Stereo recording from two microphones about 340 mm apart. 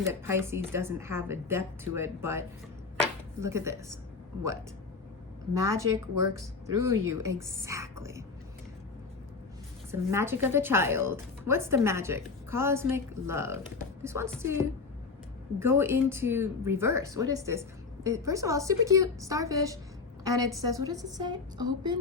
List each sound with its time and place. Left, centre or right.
0.0 s a woman's voice: centre
3.4 s a woman's voice: centre
5.5 s speech: right
7.2 s a woman's voice: centre
9.9 s a woman's voice: centre